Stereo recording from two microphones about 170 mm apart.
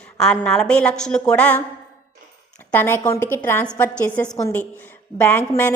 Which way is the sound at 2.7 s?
15° left (ahead or behind).